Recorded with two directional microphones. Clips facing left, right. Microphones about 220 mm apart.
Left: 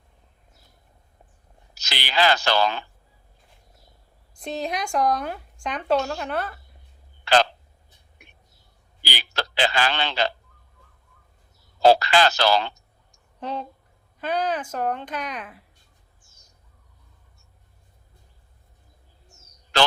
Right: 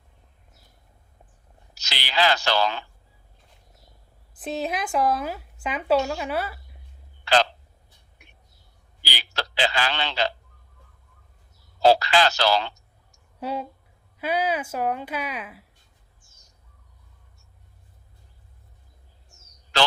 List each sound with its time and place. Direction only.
1.7 s speech: 55° left (ahead or behind)
4.4 s speech: 5° right (ahead or behind)
9.0 s a sound: 55° left (ahead or behind)
11.8 s a man's voice: 50° left (ahead or behind)
13.4 s a woman's voice: 10° right (ahead or behind)